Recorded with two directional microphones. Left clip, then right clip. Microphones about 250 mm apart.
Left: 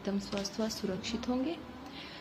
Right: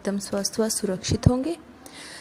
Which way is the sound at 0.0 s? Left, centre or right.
Right.